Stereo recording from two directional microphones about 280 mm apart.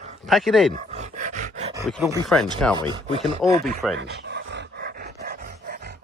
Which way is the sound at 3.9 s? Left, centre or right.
Right.